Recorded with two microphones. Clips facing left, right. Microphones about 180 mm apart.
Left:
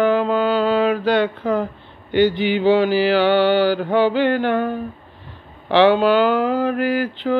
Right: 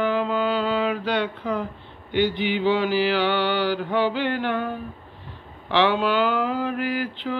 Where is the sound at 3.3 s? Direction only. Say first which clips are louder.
Left 7 dB; 40° left (ahead or behind).